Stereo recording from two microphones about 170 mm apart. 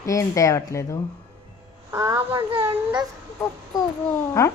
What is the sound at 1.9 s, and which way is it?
A child's voice, 20° right (ahead or behind).